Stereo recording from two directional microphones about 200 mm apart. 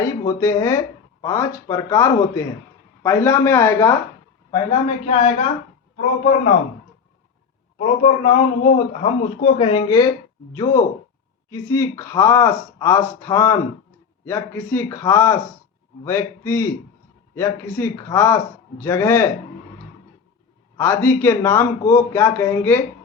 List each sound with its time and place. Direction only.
0.0 s speech: 15° left (ahead or behind)
5.0 s speech: 30° left (ahead or behind)
7.8 s speech: 35° left (ahead or behind); by 19.3 s 15° left (ahead or behind)
20.7 s speech: 10° left (ahead or behind)